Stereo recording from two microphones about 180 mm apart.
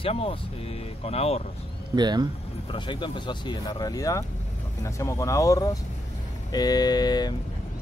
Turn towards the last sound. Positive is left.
turn(degrees=20)  # may be behind; listen again after turning